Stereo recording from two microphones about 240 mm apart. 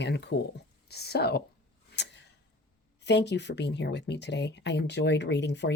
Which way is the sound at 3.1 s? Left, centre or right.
Left.